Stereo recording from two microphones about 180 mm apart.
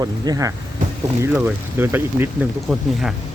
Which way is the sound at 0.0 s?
20° right (ahead or behind).